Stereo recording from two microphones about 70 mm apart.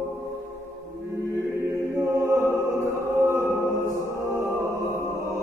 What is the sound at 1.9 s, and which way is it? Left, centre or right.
Music, right.